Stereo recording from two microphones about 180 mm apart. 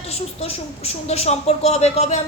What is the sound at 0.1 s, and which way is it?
A woman's voice, 35° left (ahead or behind).